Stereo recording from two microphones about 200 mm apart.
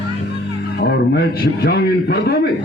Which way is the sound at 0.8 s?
55° left (ahead or behind).